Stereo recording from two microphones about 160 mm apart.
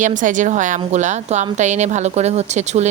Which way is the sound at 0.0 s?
55° right (ahead or behind).